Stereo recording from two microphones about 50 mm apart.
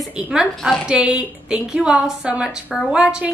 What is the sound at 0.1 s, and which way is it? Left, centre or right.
A woman's voice, centre.